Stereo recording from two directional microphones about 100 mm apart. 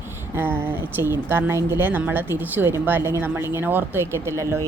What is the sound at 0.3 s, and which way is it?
Speech, 20° right (ahead or behind).